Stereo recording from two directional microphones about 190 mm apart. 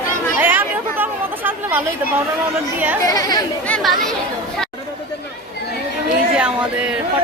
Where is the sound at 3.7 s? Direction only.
Centre (ahead or behind).